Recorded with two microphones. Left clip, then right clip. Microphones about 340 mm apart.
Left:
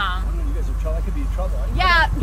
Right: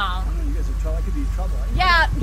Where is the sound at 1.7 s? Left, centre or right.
Centre.